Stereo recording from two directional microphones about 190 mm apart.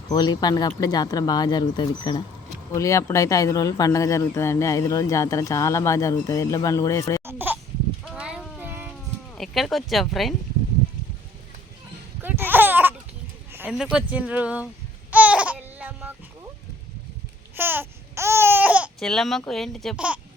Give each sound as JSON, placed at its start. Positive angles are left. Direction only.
{"t": 0.1, "sound": "speech", "side_deg": 20}
{"t": 7.3, "sound": "a sound", "side_deg": -10}
{"t": 8.1, "sound": "child singing", "side_deg": -5}
{"t": 9.3, "sound": "speech", "side_deg": 0}
{"t": 12.2, "sound": "laughter", "side_deg": -10}
{"t": 13.7, "sound": "speech", "side_deg": -5}
{"t": 15.1, "sound": "babbling", "side_deg": -5}
{"t": 17.5, "sound": "babbling", "side_deg": -10}